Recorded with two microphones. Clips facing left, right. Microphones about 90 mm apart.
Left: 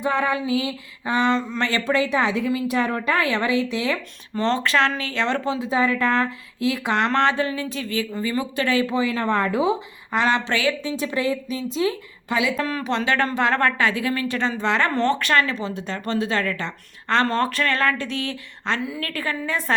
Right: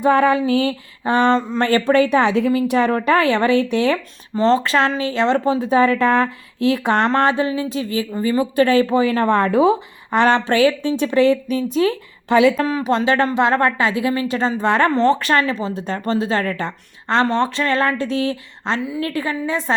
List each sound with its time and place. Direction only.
0.0 s a woman's voice: 65° right (ahead or behind)
4.4 s speech: 30° right (ahead or behind)
5.5 s a woman's voice: 60° right (ahead or behind)
7.1 s speech: 30° right (ahead or behind)
8.6 s speech: 45° right (ahead or behind)
10.8 s a woman's voice: 55° right (ahead or behind)
12.6 s speech: 25° right (ahead or behind)
14.3 s speech: 35° right (ahead or behind)
17.2 s speech: 20° right (ahead or behind)
18.9 s speech: 20° right (ahead or behind)